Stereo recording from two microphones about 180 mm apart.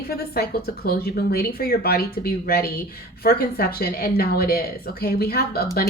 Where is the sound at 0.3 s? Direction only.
60° left (ahead or behind).